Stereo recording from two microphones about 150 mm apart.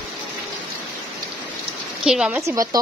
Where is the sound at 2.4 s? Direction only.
20° right (ahead or behind).